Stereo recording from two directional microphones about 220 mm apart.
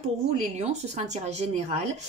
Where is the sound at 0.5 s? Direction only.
30° right (ahead or behind).